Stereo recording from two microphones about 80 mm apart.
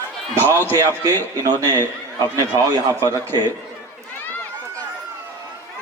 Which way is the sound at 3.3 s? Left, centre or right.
Right.